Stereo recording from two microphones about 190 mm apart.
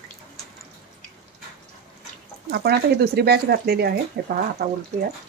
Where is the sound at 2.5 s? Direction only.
55° right (ahead or behind).